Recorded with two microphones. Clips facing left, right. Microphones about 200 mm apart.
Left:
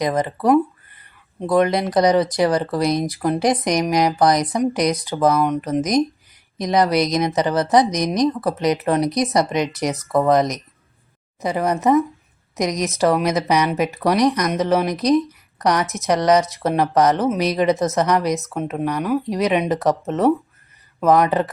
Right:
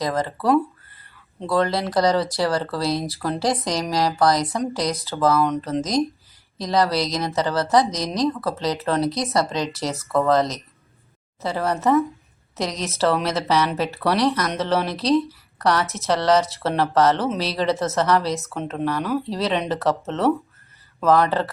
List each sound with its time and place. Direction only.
0.0 s speech: 20° left (ahead or behind)